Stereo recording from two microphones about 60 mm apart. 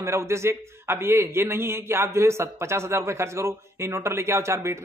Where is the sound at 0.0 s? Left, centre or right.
Right.